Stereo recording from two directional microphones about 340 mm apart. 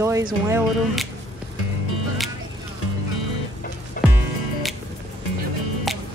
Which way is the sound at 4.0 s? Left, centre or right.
Left.